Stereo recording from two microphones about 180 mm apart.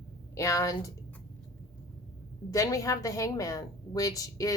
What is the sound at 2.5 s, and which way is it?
A woman's voice, 20° left (ahead or behind).